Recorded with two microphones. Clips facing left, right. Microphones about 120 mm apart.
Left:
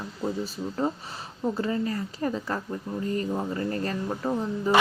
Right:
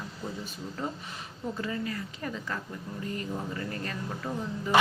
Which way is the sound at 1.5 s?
35° left (ahead or behind).